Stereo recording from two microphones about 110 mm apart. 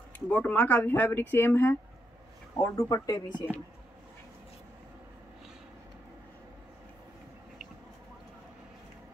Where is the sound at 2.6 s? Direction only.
30° left (ahead or behind).